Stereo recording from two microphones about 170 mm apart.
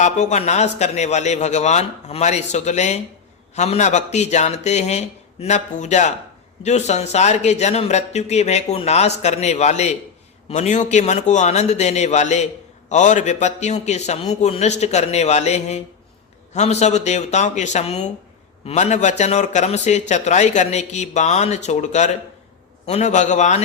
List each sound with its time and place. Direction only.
0.0 s a man's voice: 40° left (ahead or behind)